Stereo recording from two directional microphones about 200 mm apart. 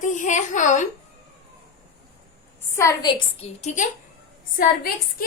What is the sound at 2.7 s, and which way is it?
A woman's voice, 20° left (ahead or behind).